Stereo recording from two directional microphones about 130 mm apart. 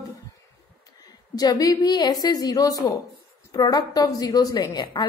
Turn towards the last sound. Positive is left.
turn(degrees=35)  # may be behind; listen again after turning